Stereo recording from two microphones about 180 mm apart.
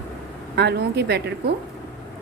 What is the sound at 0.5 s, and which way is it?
Speech, 65° right (ahead or behind).